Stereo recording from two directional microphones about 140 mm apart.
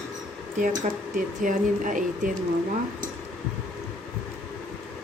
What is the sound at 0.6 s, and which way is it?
Speech, 70° right (ahead or behind).